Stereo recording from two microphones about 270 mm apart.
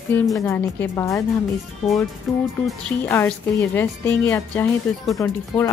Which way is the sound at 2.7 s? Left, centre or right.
Centre.